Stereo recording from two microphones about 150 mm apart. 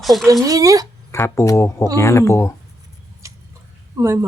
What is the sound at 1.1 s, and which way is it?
Speech, 15° left (ahead or behind).